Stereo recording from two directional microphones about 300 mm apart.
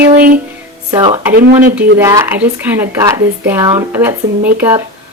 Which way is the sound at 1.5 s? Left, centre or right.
Right.